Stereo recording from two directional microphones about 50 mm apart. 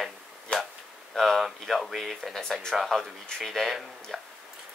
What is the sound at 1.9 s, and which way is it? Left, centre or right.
Speech, centre.